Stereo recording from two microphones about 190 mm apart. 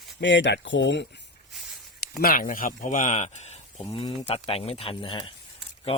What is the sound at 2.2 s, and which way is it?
Speech, 50° left (ahead or behind).